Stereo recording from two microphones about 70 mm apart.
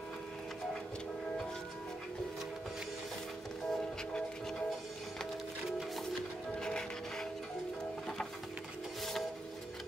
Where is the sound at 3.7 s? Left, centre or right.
Centre.